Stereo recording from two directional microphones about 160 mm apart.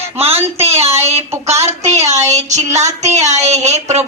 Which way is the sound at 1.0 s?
40° right (ahead or behind).